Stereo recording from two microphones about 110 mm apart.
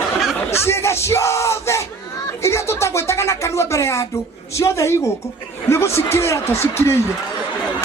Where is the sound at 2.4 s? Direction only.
25° left (ahead or behind).